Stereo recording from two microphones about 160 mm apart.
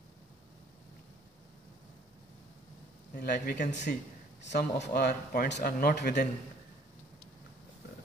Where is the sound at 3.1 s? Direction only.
85° left.